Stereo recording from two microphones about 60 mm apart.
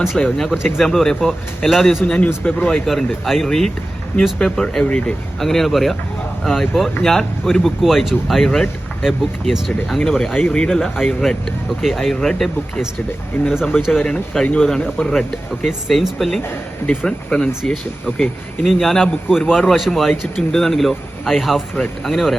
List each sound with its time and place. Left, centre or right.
0.2 s speech: centre
2.0 s a man's voice: left
2.6 s speech: centre
5.4 s speech: centre
10.3 s speech: centre
13.3 s speech: left
13.7 s a man's voice: centre
15.6 s speech: centre
16.8 s a man's voice: left
18.6 s speech: centre